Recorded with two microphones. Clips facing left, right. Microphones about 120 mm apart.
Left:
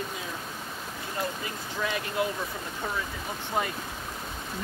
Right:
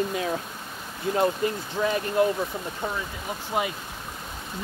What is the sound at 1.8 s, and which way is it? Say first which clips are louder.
Speech: right 6 dB; 30° right (ahead or behind).